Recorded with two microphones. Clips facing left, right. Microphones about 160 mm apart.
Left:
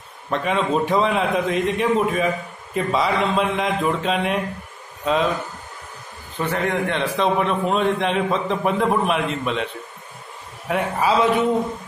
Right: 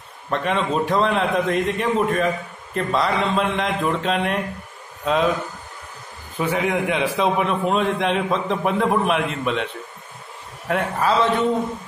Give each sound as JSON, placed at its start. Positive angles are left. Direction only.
{"t": 0.3, "sound": "a man's voice", "side_deg": 0}
{"t": 6.3, "sound": "a man's voice", "side_deg": -5}
{"t": 10.7, "sound": "a man's voice", "side_deg": 0}